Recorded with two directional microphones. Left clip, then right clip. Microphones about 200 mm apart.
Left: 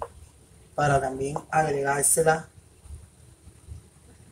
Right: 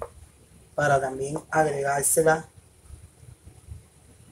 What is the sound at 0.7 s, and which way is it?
Speech, 15° right (ahead or behind).